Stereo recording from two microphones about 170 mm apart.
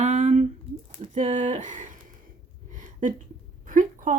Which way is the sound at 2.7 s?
50° right (ahead or behind).